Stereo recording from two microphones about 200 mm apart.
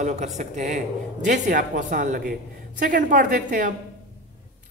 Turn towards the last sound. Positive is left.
turn(degrees=-40)  # may be behind; listen again after turning